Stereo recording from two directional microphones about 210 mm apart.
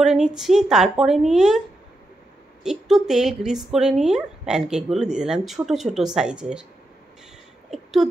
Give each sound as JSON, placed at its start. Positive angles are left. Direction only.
{"t": 0.0, "sound": "speech", "side_deg": 0}
{"t": 2.6, "sound": "speech", "side_deg": 0}
{"t": 7.7, "sound": "speech", "side_deg": 0}